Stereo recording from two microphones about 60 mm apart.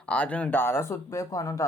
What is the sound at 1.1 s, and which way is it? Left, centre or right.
Speech, left.